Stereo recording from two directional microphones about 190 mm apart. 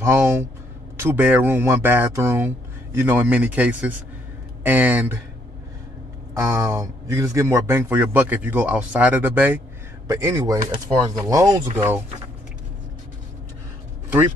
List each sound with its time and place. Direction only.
0.0 s speech: 10° right (ahead or behind)
6.4 s speech: 15° right (ahead or behind)